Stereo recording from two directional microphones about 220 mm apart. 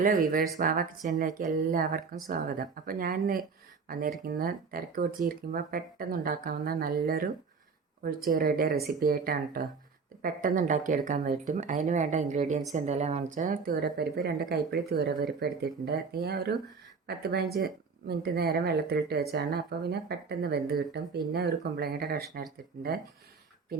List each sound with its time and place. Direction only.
0.0 s speech: 40° right (ahead or behind)
8.3 s speech: 40° right (ahead or behind)